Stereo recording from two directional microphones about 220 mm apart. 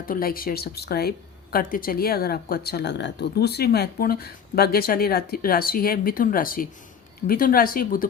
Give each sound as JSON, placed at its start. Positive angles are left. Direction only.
{"t": 0.0, "sound": "speech", "side_deg": 40}